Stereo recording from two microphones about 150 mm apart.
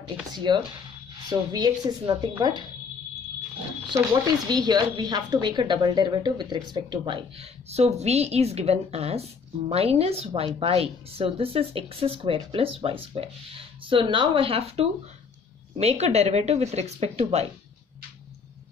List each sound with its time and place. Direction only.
0.3 s a woman's voice: 30° right (ahead or behind)
3.9 s speech: 25° right (ahead or behind); by 17.5 s 45° right (ahead or behind)